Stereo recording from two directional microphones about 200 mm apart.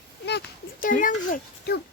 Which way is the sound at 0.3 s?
50° left (ahead or behind).